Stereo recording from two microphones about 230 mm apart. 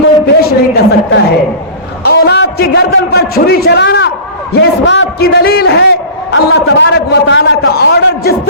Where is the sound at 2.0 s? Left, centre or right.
Left.